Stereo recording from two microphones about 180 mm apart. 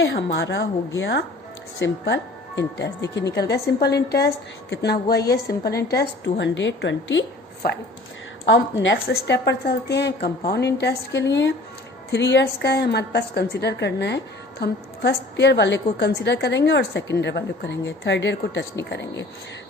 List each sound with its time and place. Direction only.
0.0 s a woman's voice: 85° left; by 6.3 s 65° left (ahead or behind)
6.4 s a woman's voice: 90° left
8.4 s a woman's voice: 90° left; by 19.2 s 70° left (ahead or behind)